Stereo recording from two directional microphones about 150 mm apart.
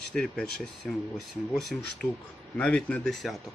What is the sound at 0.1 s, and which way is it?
Speech, 5° left (ahead or behind).